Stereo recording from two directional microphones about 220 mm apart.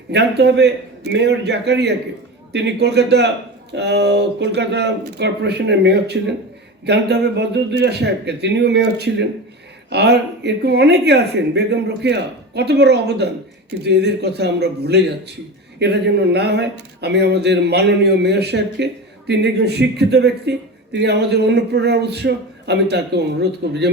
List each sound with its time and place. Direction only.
0.1 s speech: 50° right (ahead or behind)